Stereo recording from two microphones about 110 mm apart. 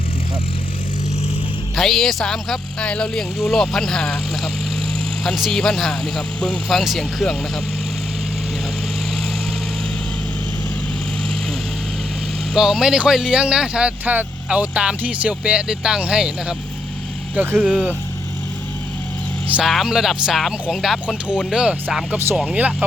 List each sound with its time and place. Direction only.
1.7 s speech: centre (ahead or behind)
5.2 s speech: centre (ahead or behind)
12.5 s speech: 5° right (ahead or behind)
17.3 s speech: 20° right (ahead or behind)
17.6 s speech: 5° right (ahead or behind)
19.5 s speech: centre (ahead or behind)